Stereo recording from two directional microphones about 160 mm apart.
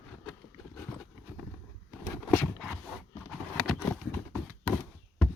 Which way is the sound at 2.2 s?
15° left (ahead or behind).